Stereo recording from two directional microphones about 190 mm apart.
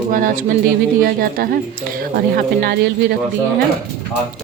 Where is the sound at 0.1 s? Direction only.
45° right (ahead or behind).